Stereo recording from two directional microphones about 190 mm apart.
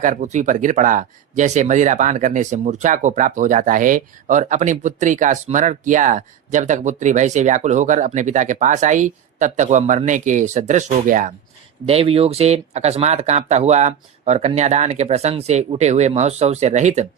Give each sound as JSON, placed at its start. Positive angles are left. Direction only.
{"t": 0.0, "sound": "speech", "side_deg": -40}
{"t": 11.9, "sound": "speech", "side_deg": -30}